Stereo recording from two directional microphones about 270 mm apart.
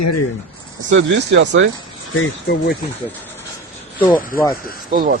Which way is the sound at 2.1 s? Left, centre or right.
Left.